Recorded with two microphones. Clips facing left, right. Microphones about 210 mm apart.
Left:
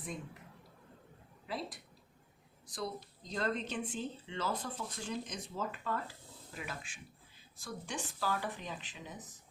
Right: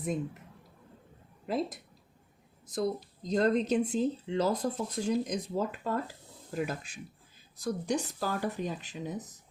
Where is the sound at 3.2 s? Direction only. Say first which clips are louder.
Right 10 dB; 40° right (ahead or behind).